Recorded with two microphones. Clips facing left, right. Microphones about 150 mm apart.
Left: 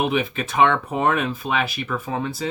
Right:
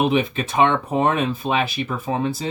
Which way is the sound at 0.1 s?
30° right (ahead or behind).